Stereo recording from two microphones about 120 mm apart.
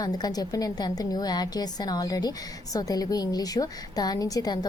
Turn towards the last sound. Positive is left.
turn(degrees=30)  # may be behind; listen again after turning